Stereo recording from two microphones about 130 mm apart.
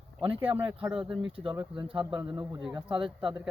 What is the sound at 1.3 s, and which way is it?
A man's voice, 45° right (ahead or behind).